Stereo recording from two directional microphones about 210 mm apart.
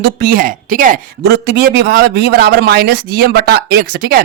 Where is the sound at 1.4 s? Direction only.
50° right (ahead or behind).